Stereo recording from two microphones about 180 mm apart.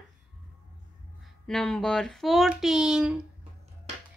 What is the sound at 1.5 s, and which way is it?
A child's voice, 5° left (ahead or behind).